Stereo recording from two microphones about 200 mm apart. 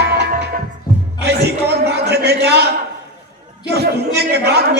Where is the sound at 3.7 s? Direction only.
55° right (ahead or behind).